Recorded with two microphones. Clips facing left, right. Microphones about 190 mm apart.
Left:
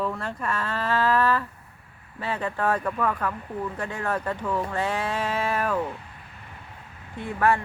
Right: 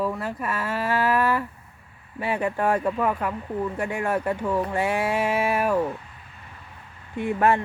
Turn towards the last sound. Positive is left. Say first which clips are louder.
# right 2 dB
turn(degrees=-20)  # may be behind; listen again after turning